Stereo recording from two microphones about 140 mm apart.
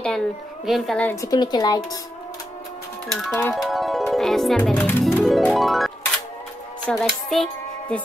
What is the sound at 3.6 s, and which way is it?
Music, centre (ahead or behind).